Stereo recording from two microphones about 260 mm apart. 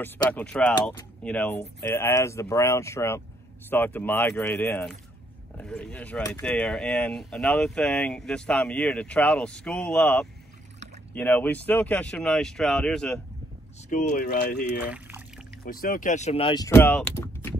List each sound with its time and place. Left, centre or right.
0.0 s speech: centre
13.8 s speech: left
14.8 s pour: centre
15.6 s speech: left; by 17.6 s centre